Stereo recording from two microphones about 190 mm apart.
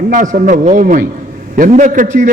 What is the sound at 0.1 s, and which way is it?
A man's voice, 45° right (ahead or behind).